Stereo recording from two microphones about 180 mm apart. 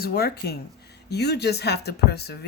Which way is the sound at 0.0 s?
60° left (ahead or behind).